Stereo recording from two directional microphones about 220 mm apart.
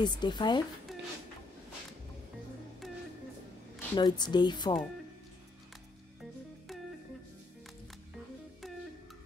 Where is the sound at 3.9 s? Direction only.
20° left (ahead or behind).